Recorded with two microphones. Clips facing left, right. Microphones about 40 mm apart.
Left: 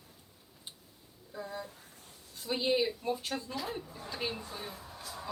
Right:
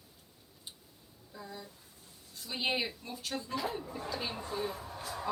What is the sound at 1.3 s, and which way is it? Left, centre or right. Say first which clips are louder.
Speech: left 5 dB; centre.